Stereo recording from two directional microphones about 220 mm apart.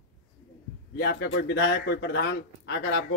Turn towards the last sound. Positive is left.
turn(degrees=55)  # may be behind; listen again after turning